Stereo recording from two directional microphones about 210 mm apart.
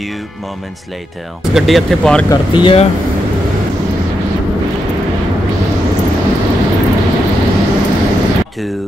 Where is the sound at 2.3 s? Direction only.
25° left (ahead or behind).